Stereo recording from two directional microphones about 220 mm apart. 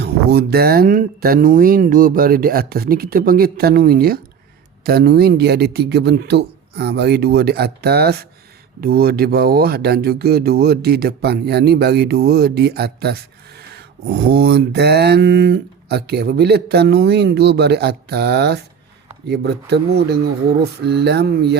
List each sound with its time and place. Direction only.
0.0 s mantra: 45° right (ahead or behind)